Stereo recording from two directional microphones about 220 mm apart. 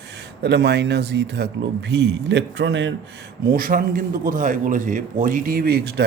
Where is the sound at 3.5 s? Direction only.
40° right (ahead or behind).